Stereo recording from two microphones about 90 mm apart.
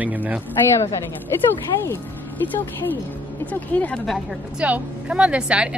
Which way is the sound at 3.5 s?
15° left (ahead or behind).